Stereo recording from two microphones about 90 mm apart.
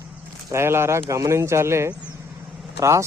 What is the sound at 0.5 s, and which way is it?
Speech, 30° right (ahead or behind).